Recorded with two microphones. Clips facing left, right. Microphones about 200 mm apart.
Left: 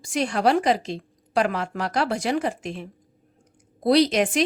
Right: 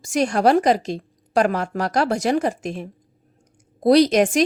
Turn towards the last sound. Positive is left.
turn(degrees=-45)  # may be behind; listen again after turning